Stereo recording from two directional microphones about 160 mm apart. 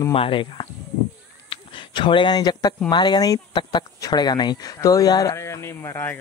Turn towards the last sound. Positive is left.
turn(degrees=15)  # may be behind; listen again after turning